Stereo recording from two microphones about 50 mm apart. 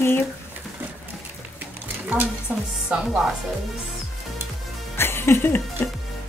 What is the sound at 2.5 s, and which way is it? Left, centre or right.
Music, right.